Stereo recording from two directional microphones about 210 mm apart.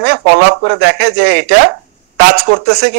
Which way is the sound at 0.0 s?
50° right (ahead or behind).